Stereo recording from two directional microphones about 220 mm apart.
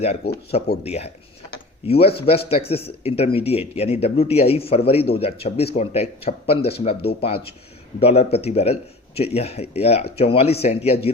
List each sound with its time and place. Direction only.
0.5 s speech: 30° left (ahead or behind)
7.1 s speech: 45° left (ahead or behind)
7.9 s speech: 25° left (ahead or behind)